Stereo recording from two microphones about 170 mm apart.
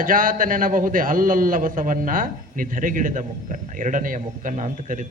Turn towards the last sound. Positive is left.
turn(degrees=-50)  # may be behind; listen again after turning